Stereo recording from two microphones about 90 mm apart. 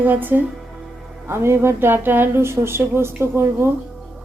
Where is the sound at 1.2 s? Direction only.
30° right (ahead or behind).